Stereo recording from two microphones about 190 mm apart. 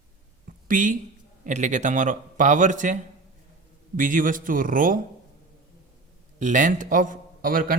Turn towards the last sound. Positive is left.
turn(degrees=-50)  # may be behind; listen again after turning